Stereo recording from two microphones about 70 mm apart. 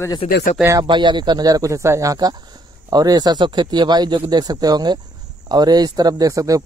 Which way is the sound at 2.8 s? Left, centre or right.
Right.